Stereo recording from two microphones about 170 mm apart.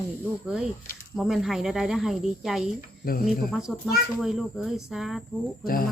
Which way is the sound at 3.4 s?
Centre (ahead or behind).